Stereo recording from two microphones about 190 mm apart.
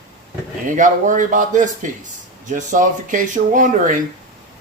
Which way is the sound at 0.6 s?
40° right (ahead or behind).